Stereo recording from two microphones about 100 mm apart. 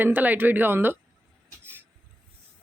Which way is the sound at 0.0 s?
20° right (ahead or behind).